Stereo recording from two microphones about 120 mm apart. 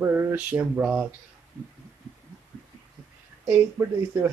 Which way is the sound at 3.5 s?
25° right (ahead or behind).